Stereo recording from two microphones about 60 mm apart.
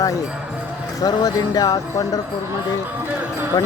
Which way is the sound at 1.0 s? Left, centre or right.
Left.